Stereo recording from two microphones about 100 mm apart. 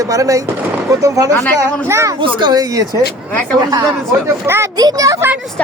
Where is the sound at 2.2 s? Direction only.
50° right (ahead or behind).